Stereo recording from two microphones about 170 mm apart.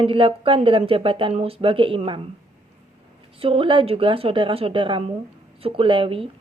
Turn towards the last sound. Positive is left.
turn(degrees=-30)  # may be behind; listen again after turning